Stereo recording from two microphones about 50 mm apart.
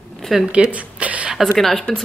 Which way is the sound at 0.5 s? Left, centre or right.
Right.